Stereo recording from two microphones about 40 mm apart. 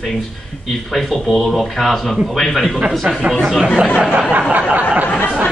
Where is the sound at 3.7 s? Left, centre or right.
Right.